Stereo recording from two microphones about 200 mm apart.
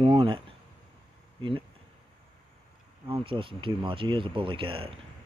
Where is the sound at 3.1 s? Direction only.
25° right (ahead or behind).